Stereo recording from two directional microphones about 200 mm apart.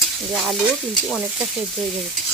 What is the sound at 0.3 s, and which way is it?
Speech, centre (ahead or behind).